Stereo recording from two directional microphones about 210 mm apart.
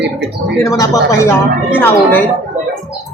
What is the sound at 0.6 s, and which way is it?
Speech, 15° left (ahead or behind).